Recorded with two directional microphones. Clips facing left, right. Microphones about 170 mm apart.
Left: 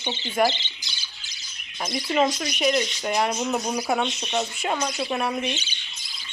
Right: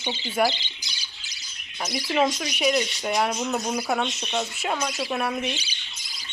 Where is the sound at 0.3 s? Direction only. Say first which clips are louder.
Left 1 dB; 10° right (ahead or behind).